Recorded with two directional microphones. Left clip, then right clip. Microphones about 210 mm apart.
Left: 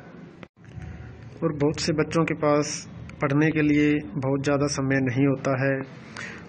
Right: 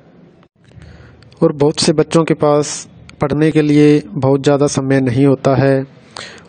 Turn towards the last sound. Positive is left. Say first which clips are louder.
# right 12 dB
turn(degrees=-60)  # may be behind; listen again after turning